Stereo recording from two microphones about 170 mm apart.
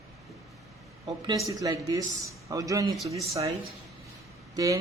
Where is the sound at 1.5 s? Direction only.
20° right (ahead or behind).